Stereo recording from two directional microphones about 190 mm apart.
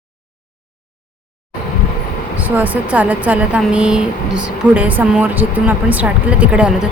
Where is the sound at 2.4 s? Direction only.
10° right (ahead or behind).